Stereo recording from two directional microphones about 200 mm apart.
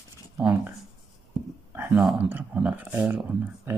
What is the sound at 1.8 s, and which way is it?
Speech, 5° right (ahead or behind).